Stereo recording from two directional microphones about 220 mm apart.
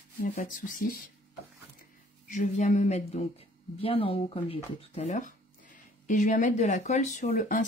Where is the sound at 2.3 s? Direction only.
35° left (ahead or behind).